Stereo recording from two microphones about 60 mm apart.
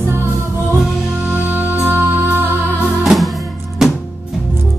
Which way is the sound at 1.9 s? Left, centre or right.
Right.